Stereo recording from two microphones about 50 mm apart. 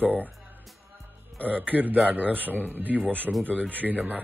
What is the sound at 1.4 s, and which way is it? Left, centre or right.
Speech, right.